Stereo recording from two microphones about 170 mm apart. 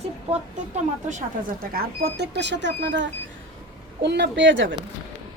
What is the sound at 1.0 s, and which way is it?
Speech, 50° right (ahead or behind).